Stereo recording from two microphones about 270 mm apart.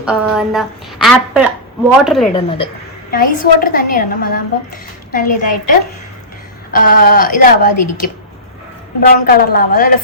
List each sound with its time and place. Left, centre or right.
0.0 s a woman's voice: centre
2.3 s a woman's voice: centre
3.1 s a woman's voice: left
6.7 s a woman's voice: left